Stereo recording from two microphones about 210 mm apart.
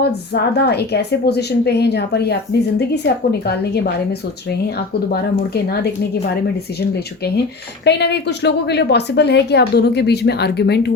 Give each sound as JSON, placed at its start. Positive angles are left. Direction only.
{"t": 0.0, "sound": "a woman's voice", "side_deg": 50}
{"t": 5.1, "sound": "a woman's voice", "side_deg": 50}
{"t": 7.9, "sound": "a woman's voice", "side_deg": 55}